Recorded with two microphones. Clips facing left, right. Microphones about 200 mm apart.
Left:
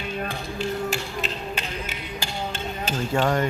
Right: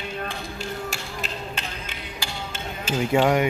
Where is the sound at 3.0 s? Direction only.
10° right (ahead or behind).